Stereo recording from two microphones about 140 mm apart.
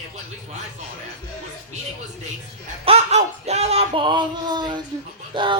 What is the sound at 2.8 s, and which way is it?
Speech, 50° right (ahead or behind).